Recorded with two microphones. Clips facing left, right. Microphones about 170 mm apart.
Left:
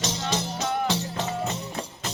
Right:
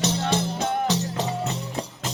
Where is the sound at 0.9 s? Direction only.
40° right (ahead or behind).